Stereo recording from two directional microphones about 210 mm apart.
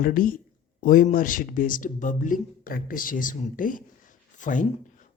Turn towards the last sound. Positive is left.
turn(degrees=40)  # may be behind; listen again after turning